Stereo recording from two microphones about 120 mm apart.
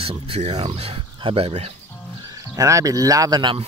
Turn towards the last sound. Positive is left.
turn(degrees=-40)  # may be behind; listen again after turning